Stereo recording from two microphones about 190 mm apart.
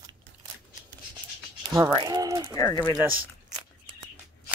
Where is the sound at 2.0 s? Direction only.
25° right (ahead or behind).